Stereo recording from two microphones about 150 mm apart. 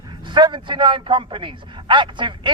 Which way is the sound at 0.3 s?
30° right (ahead or behind).